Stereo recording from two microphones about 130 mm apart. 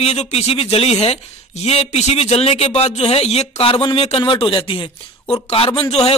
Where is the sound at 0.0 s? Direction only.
55° left (ahead or behind).